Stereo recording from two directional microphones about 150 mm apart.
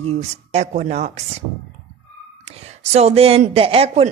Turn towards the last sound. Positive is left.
turn(degrees=-40)  # may be behind; listen again after turning